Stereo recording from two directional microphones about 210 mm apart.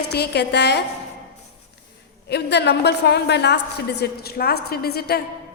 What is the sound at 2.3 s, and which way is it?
A woman's voice, 55° left (ahead or behind).